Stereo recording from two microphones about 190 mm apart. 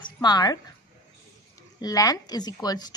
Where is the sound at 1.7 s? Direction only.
20° left (ahead or behind).